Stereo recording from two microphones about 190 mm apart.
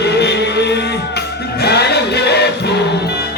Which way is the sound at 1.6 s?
60° left (ahead or behind).